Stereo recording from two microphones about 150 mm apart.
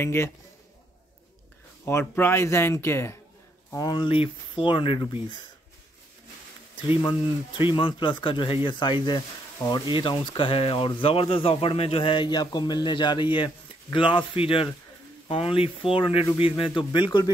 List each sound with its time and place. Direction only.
0.0 s speech: 15° left (ahead or behind)
1.9 s speech: 15° left (ahead or behind)
3.7 s speech: 30° left (ahead or behind)
6.9 s speech: 30° left (ahead or behind)